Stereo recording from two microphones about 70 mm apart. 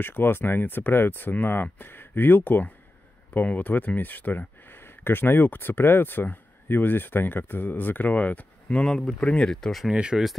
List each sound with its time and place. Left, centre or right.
0.0 s speech: left
8.8 s speech: centre
9.8 s speech: centre